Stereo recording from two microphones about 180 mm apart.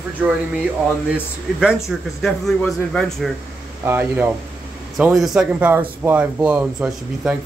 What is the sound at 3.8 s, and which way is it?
Speech, 10° right (ahead or behind).